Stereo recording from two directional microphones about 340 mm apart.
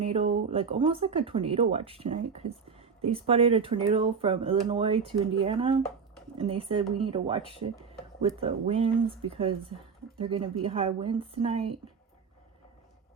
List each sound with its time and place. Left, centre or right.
0.0 s speech: centre